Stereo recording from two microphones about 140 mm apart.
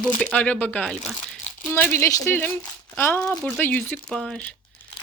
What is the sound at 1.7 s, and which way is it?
Speech, 20° left (ahead or behind).